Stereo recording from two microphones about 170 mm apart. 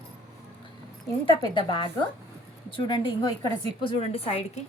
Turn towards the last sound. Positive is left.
turn(degrees=35)  # may be behind; listen again after turning